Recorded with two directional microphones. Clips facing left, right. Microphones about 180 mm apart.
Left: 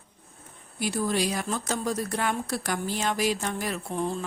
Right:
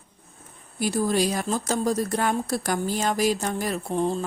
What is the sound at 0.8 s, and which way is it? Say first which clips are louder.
Speech: right 4 dB; 40° right (ahead or behind).